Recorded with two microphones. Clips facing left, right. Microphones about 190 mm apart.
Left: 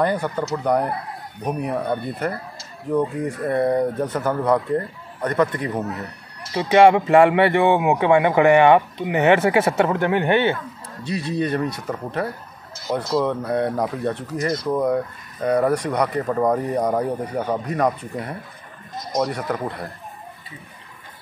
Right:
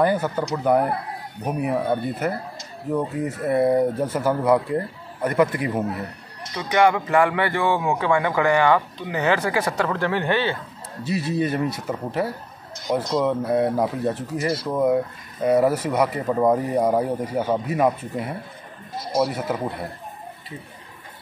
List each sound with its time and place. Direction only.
0.0 s speech: 5° right (ahead or behind)
6.5 s speech: 25° left (ahead or behind)
11.1 s speech: 5° right (ahead or behind)
12.7 s a sound: 5° left (ahead or behind)
13.2 s speech: 5° right (ahead or behind)